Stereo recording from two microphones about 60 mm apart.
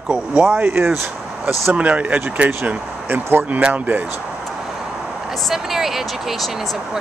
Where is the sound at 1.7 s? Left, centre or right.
Right.